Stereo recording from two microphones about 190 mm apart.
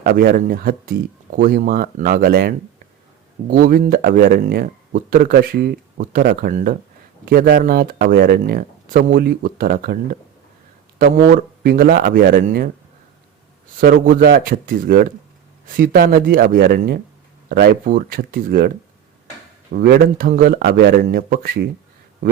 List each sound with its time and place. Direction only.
0.0 s speech: 55° right (ahead or behind)
13.7 s speech: 45° right (ahead or behind)
19.7 s speech: 50° right (ahead or behind)